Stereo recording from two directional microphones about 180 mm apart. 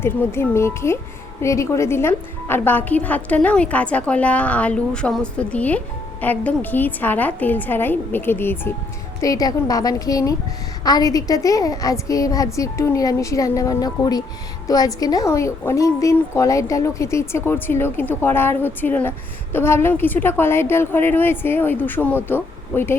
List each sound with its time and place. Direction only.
0.0 s a woman's voice: 15° left (ahead or behind)